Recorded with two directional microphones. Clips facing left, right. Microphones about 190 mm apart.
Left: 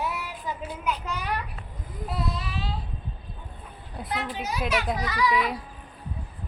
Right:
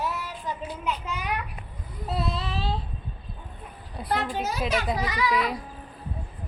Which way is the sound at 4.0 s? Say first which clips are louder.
Right 4 dB; centre (ahead or behind).